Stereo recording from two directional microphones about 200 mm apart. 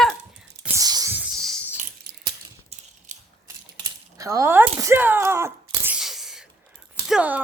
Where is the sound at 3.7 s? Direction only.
15° right (ahead or behind).